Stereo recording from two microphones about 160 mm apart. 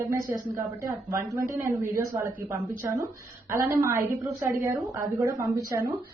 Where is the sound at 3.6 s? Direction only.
15° right (ahead or behind).